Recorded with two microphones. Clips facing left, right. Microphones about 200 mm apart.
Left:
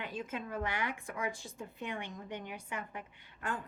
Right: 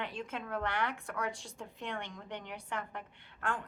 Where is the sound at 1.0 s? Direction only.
70° right (ahead or behind).